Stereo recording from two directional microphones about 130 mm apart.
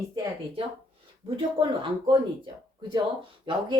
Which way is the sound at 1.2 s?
40° right (ahead or behind).